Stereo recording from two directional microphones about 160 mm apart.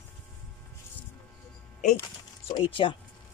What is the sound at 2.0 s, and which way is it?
Speech, 35° left (ahead or behind).